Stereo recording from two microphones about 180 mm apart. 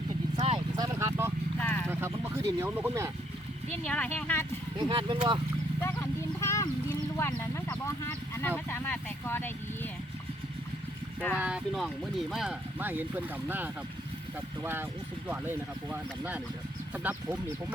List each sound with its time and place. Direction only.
0.3 s clip-clop: 35° right (ahead or behind)
0.8 s clip-clop: 15° right (ahead or behind)
1.6 s a sound: 5° left (ahead or behind)
1.9 s speech: 15° right (ahead or behind)
3.8 s speech: 10° left (ahead or behind)
4.8 s speech: 25° right (ahead or behind)
5.8 s horse: 15° left (ahead or behind)
7.2 s speech: 15° left (ahead or behind)
11.3 s speech: 5° right (ahead or behind)